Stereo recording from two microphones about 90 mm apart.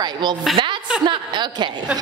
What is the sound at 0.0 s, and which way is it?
A woman's voice, 55° right (ahead or behind).